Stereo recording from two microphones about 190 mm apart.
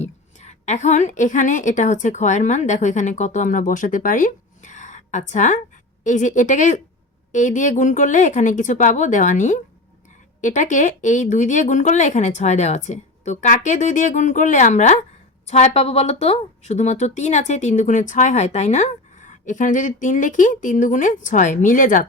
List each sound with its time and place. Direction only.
0.0 s a woman's voice: 40° left (ahead or behind)